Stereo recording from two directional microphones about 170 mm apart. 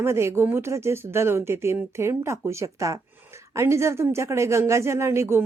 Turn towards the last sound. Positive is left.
turn(degrees=-15)  # may be behind; listen again after turning